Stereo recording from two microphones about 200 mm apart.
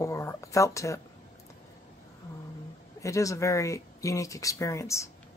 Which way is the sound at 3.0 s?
15° left (ahead or behind).